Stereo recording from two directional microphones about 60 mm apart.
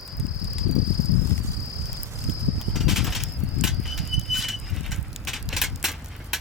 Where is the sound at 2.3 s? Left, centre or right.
Centre.